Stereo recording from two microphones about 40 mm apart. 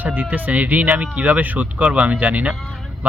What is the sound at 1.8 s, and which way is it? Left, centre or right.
Speech, right.